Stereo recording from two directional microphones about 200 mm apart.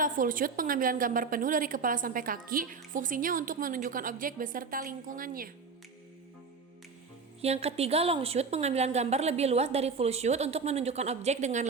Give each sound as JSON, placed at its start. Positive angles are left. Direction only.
{"t": 0.0, "sound": "a woman's voice", "side_deg": -40}
{"t": 7.4, "sound": "a woman's voice", "side_deg": -30}